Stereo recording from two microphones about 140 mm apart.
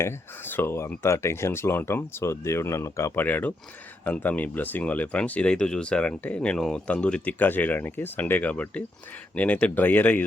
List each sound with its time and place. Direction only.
0.0 s speech: 15° left (ahead or behind)